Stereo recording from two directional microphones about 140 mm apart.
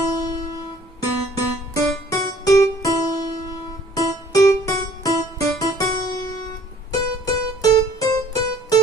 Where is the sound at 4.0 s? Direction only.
25° left (ahead or behind).